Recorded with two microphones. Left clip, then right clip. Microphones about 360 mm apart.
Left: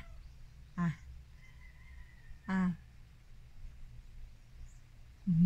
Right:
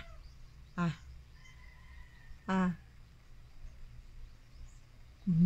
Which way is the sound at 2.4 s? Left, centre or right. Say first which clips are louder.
Right 4 dB; centre.